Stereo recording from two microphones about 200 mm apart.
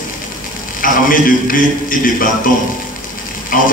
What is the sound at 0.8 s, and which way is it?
A man's voice, 45° left (ahead or behind).